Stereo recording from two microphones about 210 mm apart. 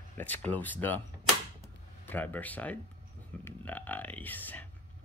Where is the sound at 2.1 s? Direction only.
10° left (ahead or behind).